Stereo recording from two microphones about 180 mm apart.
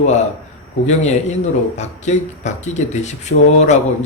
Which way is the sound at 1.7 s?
40° left (ahead or behind).